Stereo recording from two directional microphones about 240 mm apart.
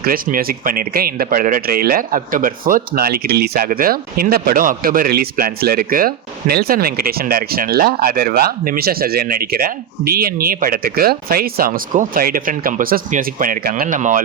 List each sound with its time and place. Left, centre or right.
0.0 s speech: right